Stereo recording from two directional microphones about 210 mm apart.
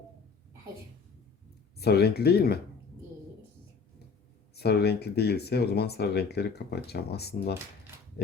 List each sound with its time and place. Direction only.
1.8 s speech: 50° left (ahead or behind)
4.5 s speech: 50° left (ahead or behind)